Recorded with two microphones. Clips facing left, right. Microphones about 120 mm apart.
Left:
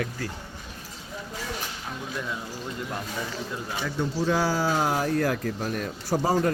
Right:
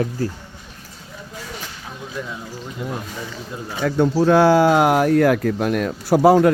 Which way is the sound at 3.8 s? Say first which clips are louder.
Right 11 dB; 65° right (ahead or behind).